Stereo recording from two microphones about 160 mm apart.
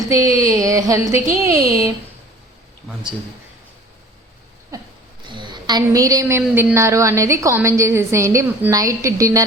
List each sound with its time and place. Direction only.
0.0 s a woman's voice: 20° right (ahead or behind)
5.3 s a woman's voice: 30° right (ahead or behind)